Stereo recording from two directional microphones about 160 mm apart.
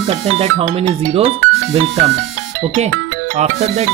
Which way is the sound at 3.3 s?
45° right (ahead or behind).